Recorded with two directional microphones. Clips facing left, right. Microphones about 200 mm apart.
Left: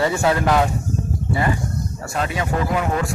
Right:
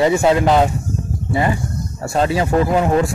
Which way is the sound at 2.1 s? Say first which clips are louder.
Right 7 dB; 30° right (ahead or behind).